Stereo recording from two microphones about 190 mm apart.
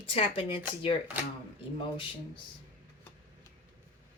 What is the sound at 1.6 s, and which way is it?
Speech, 25° left (ahead or behind).